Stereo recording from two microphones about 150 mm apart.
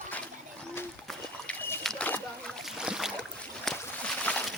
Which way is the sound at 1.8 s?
5° left (ahead or behind).